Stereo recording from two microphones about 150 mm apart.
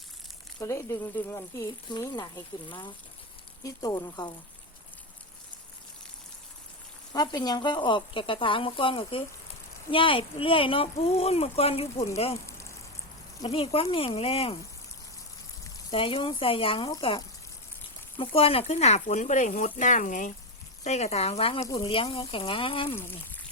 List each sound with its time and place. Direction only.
0.6 s speech: 20° left (ahead or behind)
7.1 s speech: 30° left (ahead or behind)
13.4 s speech: 40° left (ahead or behind)
15.9 s speech: 35° left (ahead or behind); by 20.3 s 60° left (ahead or behind)
20.8 s speech: 45° left (ahead or behind)